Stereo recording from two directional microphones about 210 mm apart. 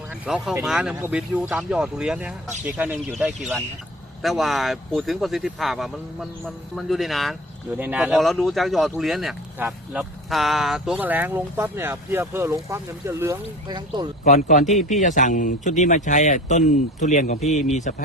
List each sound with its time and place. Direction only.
0.3 s speech: 5° right (ahead or behind); by 14.1 s 20° right (ahead or behind)
14.3 s speech: 35° left (ahead or behind)